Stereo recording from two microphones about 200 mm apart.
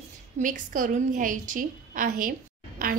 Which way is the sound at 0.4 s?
40° right (ahead or behind).